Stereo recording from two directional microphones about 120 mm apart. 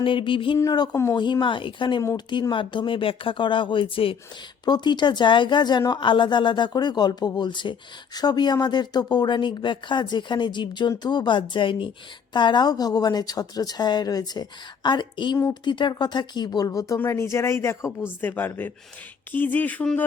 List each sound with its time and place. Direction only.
0.0 s speech: 45° left (ahead or behind)
0.6 s speech: 30° left (ahead or behind)
1.1 s speech: 40° left (ahead or behind)
2.0 s speech: 35° left (ahead or behind)
4.6 s speech: 35° left (ahead or behind); by 20.1 s 10° left (ahead or behind)